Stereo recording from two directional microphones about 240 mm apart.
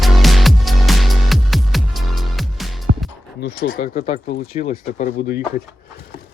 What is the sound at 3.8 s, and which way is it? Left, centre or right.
Speech, left.